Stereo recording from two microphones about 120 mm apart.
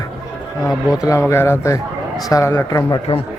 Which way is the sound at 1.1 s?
20° left (ahead or behind).